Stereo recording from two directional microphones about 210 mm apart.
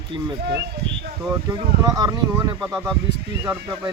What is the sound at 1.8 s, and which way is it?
Speech, 15° right (ahead or behind).